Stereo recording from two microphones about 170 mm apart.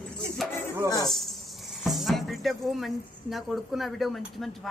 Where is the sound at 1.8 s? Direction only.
Centre (ahead or behind).